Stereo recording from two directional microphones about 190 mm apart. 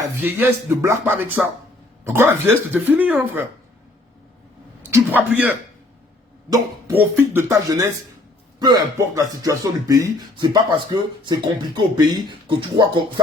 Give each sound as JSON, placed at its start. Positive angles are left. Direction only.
{"t": 0.2, "sound": "speech", "side_deg": -10}
{"t": 4.9, "sound": "speech", "side_deg": -10}